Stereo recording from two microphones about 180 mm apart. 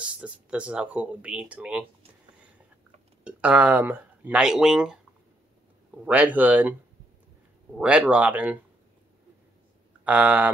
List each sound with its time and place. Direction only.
0.0 s speech: 5° right (ahead or behind)
3.3 s speech: 5° right (ahead or behind)
6.0 s speech: 10° right (ahead or behind)
7.7 s speech: 5° right (ahead or behind)
10.0 s speech: 10° right (ahead or behind)